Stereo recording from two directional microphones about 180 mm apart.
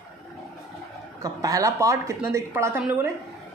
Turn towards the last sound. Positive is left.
turn(degrees=-10)  # may be behind; listen again after turning